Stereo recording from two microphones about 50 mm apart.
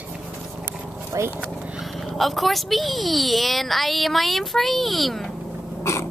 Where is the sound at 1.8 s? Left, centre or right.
Centre.